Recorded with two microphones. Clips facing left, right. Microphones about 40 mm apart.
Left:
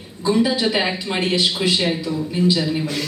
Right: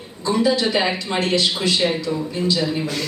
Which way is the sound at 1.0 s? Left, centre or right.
Centre.